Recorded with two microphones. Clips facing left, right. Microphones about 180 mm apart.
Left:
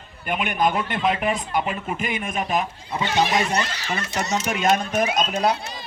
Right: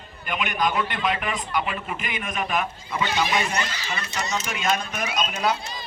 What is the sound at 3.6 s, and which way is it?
A man's voice, 60° left (ahead or behind).